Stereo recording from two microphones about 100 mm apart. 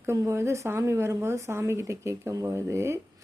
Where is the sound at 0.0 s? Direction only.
25° right (ahead or behind).